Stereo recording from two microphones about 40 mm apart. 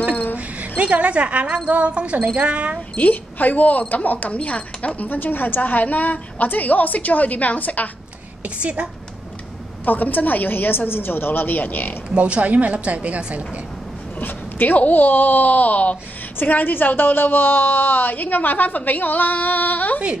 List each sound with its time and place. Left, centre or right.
0.1 s a sound: left
0.6 s a woman's voice: right
3.0 s a woman's voice: left
4.4 s speech: left
5.0 s a woman's voice: left
5.6 s a woman's voice: left
8.5 s a woman's voice: right
9.8 s a woman's voice: left
12.2 s a woman's voice: right
14.2 s a woman's voice: left
16.3 s a woman's voice: left